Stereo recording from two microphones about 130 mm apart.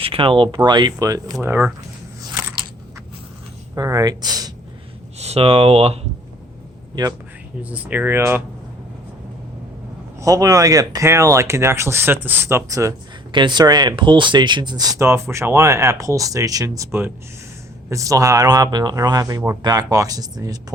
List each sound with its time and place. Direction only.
0.0 s speech: 45° right (ahead or behind); by 1.4 s 30° right (ahead or behind)
1.4 s speech: 15° right (ahead or behind)
3.8 s speech: 25° right (ahead or behind)
5.2 s speech: 50° right (ahead or behind)
7.6 s speech: 10° right (ahead or behind)
10.2 s speech: 25° right (ahead or behind)
13.3 s speech: 35° right (ahead or behind)
14.9 s speech: 20° right (ahead or behind)